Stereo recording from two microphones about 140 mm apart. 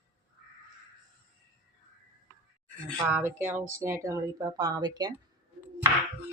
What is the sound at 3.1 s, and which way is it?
Speech, 15° right (ahead or behind).